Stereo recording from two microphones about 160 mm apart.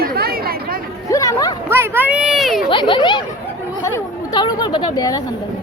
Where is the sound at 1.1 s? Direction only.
20° left (ahead or behind).